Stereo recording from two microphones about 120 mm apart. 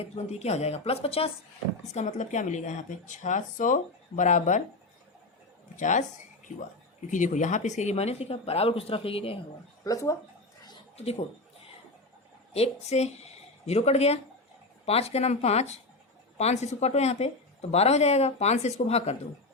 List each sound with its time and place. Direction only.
0.0 s a woman's voice: 65° left (ahead or behind)
1.9 s speech: 70° left (ahead or behind); by 4.6 s 90° left
5.7 s speech: 90° left
7.1 s a woman's voice: 90° left; by 9.4 s 50° left (ahead or behind)
9.8 s speech: 25° left (ahead or behind)
10.9 s speech: 60° left (ahead or behind)
12.5 s a woman's voice: 60° left (ahead or behind)